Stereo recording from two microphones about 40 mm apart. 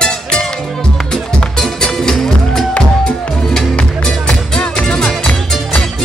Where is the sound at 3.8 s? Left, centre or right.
Centre.